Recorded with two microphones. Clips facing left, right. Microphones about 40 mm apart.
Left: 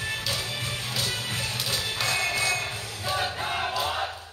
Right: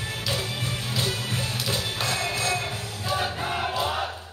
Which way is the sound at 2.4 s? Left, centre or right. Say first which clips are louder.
Even; centre.